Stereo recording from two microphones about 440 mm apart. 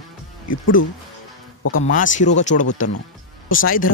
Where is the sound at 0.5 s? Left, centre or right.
Left.